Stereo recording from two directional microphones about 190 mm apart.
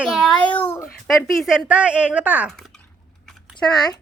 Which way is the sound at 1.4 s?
5° right (ahead or behind).